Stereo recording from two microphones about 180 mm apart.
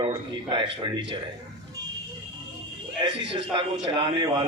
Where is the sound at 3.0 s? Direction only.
25° right (ahead or behind).